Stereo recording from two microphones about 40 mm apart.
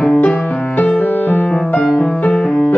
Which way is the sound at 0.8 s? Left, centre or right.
Left.